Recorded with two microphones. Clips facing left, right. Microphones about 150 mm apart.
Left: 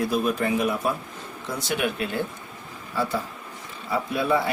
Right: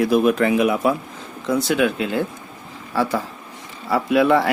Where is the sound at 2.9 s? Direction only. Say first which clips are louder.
Right 5 dB; 90° right.